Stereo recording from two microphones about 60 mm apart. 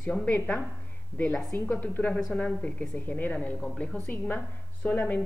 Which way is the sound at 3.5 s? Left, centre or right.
Centre.